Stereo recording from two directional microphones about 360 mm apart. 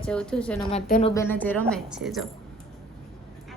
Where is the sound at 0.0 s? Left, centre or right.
Centre.